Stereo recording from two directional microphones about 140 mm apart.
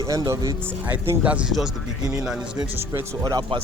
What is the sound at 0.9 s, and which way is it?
Speech, 10° right (ahead or behind).